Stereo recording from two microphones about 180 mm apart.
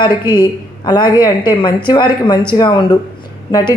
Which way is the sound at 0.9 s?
20° left (ahead or behind).